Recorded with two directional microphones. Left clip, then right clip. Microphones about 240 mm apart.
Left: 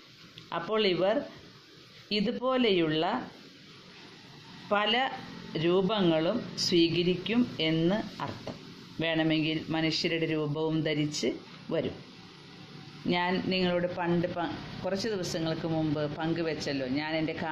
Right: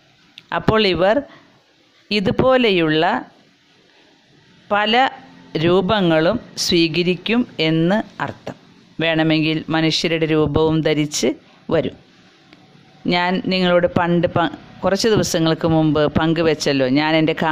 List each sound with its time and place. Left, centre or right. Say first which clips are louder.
0.5 s a man's voice: right 12 dB; right
4.6 s a man's voice: right 11 dB; right
13.0 s a man's voice: right 11 dB; right